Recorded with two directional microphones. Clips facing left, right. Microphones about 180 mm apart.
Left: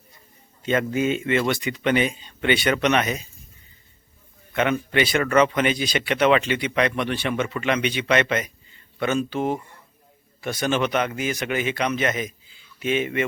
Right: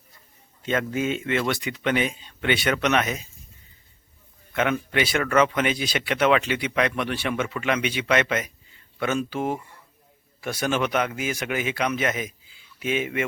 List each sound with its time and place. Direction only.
0.6 s speech: centre (ahead or behind)
4.5 s speech: centre (ahead or behind)